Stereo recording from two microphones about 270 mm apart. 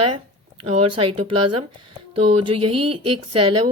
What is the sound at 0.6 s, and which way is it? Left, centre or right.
Speech, right.